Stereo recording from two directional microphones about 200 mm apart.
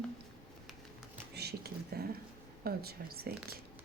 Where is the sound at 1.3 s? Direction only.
55° right (ahead or behind).